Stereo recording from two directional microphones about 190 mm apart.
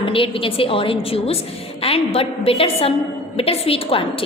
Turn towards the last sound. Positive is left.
turn(degrees=30)  # may be behind; listen again after turning